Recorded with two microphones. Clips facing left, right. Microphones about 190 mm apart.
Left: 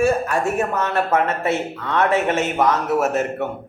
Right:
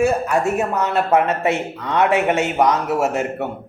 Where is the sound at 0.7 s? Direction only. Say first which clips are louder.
Right 4 dB; 15° right (ahead or behind).